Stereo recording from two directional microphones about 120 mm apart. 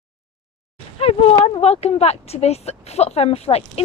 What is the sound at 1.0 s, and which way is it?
Speech, 50° left (ahead or behind).